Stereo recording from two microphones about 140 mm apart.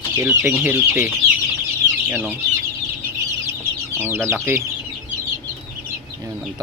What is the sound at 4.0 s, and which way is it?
Speech, 15° right (ahead or behind).